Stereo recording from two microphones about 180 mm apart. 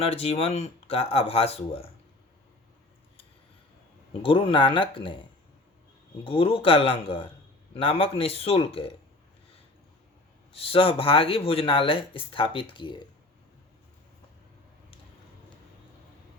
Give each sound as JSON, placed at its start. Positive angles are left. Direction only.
{"t": 0.0, "sound": "speech", "side_deg": 35}
{"t": 4.2, "sound": "speech", "side_deg": 30}
{"t": 6.2, "sound": "speech", "side_deg": 30}
{"t": 10.5, "sound": "speech", "side_deg": 30}